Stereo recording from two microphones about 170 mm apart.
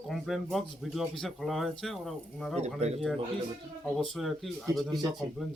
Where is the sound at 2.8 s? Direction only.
40° right (ahead or behind).